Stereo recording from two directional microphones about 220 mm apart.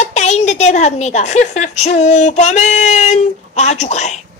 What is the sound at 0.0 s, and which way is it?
A woman's voice, 30° left (ahead or behind).